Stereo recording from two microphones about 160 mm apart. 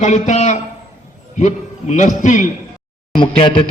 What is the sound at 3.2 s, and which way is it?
Speech, 30° left (ahead or behind).